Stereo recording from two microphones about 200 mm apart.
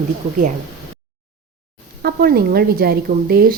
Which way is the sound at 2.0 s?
50° right (ahead or behind).